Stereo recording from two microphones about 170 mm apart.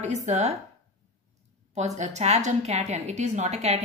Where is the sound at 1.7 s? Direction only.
45° right (ahead or behind).